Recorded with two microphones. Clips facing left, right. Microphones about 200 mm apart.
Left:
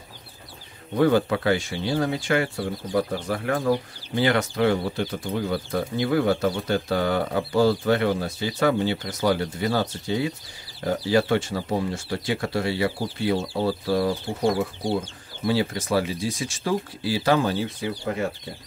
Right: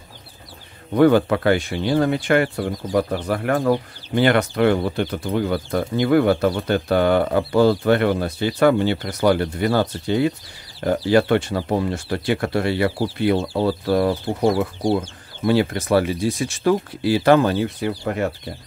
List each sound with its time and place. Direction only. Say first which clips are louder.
0.9 s speech: right 5 dB; 60° right (ahead or behind)